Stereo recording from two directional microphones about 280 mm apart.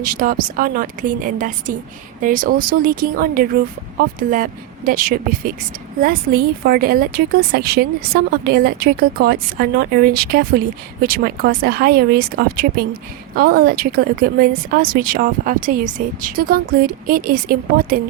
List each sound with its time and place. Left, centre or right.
0.0 s a woman's voice: right